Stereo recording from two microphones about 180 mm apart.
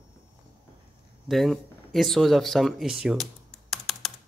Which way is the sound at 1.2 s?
Centre (ahead or behind).